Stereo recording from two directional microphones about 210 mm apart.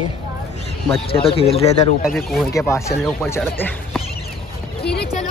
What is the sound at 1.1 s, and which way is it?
Speech, 25° left (ahead or behind).